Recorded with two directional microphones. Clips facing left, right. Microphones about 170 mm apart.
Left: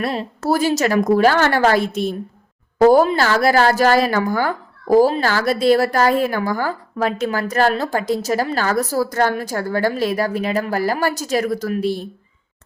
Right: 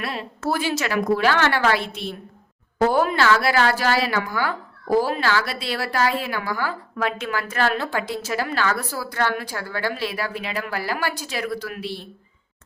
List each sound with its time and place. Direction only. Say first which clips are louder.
0.0 s a woman's voice: left 5 dB; 35° left (ahead or behind)